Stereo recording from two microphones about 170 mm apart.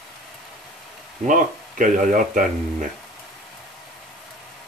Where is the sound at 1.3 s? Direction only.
50° right (ahead or behind).